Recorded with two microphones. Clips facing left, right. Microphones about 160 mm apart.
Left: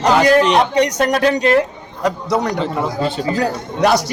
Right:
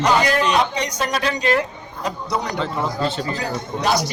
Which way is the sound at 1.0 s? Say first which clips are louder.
Left 8 dB; 50° left (ahead or behind).